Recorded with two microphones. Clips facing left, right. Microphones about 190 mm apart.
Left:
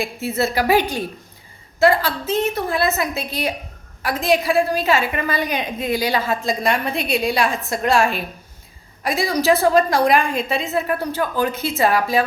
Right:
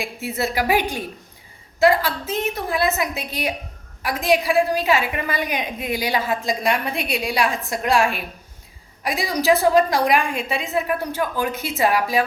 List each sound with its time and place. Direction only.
0.0 s a woman's voice: 15° right (ahead or behind)